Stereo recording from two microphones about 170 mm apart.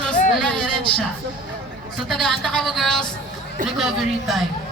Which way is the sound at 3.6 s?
55° right (ahead or behind).